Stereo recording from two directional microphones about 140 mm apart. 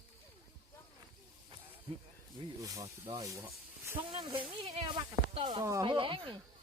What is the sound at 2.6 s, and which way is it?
Speech, 25° right (ahead or behind).